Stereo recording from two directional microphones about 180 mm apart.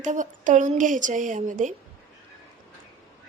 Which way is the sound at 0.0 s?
45° right (ahead or behind).